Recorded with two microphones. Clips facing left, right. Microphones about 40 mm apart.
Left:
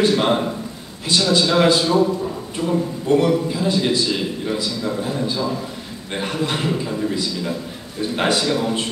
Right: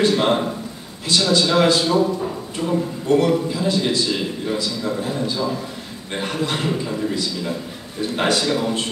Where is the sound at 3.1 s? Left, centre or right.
Left.